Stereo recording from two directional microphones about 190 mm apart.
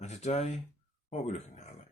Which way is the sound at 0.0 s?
35° left (ahead or behind).